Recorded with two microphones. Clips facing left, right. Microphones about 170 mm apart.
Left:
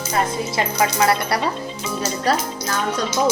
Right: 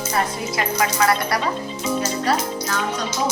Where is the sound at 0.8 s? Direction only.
25° left (ahead or behind).